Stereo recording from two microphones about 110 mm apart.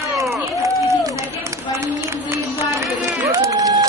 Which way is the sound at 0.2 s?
30° right (ahead or behind).